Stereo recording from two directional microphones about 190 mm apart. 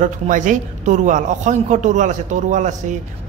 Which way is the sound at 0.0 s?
40° right (ahead or behind).